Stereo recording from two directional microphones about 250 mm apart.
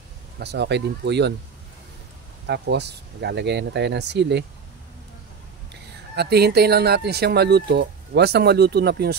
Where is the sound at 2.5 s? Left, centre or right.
Right.